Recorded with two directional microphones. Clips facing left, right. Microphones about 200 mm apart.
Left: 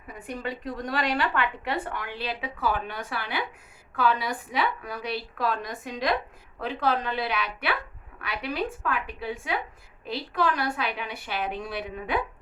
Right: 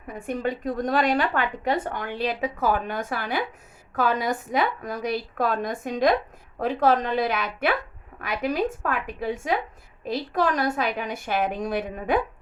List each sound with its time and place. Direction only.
0.1 s a woman's voice: 45° right (ahead or behind)